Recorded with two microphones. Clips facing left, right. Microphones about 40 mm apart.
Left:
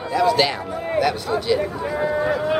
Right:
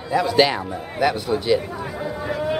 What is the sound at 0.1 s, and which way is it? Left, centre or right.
A man's voice, centre.